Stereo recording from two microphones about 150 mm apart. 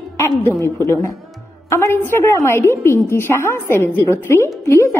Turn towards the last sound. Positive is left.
turn(degrees=20)  # may be behind; listen again after turning